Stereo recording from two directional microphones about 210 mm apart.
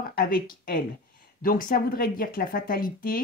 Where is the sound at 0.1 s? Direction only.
45° left (ahead or behind).